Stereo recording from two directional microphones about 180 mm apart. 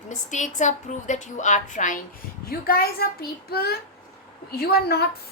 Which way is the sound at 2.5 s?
55° left (ahead or behind).